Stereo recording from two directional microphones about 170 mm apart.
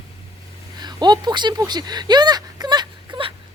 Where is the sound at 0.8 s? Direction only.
25° right (ahead or behind).